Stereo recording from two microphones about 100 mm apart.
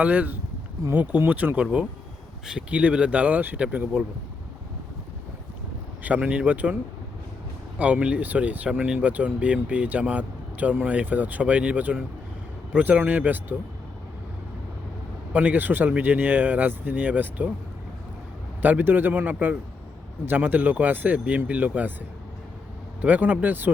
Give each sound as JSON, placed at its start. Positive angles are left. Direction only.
{"t": 0.0, "sound": "speech", "side_deg": -15}
{"t": 6.0, "sound": "speech", "side_deg": -15}
{"t": 7.8, "sound": "speech", "side_deg": -10}
{"t": 15.3, "sound": "speech", "side_deg": -15}
{"t": 18.6, "sound": "speech", "side_deg": -20}
{"t": 23.0, "sound": "speech", "side_deg": -15}